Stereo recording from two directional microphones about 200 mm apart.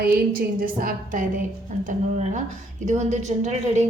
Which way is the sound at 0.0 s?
45° right (ahead or behind).